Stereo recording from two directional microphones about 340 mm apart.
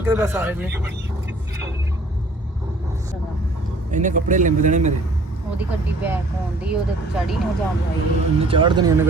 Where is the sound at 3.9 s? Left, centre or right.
Right.